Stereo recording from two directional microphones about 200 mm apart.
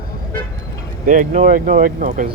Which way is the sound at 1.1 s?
40° right (ahead or behind).